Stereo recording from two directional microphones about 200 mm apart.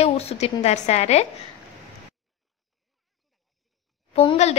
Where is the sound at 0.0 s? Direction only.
30° left (ahead or behind).